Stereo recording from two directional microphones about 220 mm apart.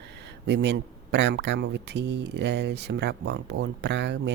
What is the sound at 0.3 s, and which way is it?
Speech, 50° right (ahead or behind).